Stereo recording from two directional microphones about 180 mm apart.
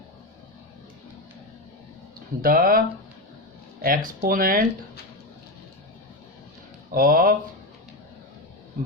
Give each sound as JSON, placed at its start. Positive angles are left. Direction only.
{"t": 2.4, "sound": "speech", "side_deg": -55}
{"t": 6.9, "sound": "speech", "side_deg": -55}